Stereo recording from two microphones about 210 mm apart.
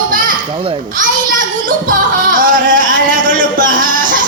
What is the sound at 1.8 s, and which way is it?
Music, 40° right (ahead or behind).